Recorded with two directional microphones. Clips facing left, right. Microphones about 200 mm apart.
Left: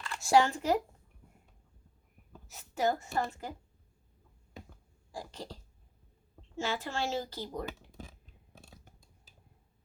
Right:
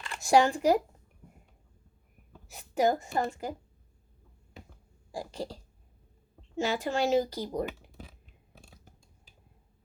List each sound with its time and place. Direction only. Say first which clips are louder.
0.0 s speech: right 3 dB; 15° right (ahead or behind)
2.5 s a woman's voice: right 5 dB; 15° right (ahead or behind)
5.1 s a woman's voice: right 6 dB; 10° right (ahead or behind)
6.6 s a woman's voice: right 6 dB; 15° right (ahead or behind)